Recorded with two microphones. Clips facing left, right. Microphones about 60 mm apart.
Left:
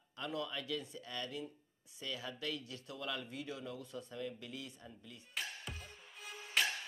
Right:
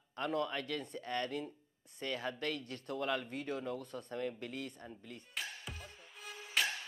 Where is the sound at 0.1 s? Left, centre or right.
Right.